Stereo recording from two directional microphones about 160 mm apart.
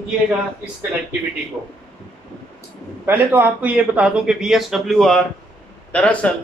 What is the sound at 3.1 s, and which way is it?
Speech, 10° right (ahead or behind).